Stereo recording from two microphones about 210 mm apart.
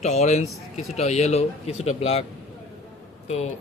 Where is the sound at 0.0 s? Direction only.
30° left (ahead or behind).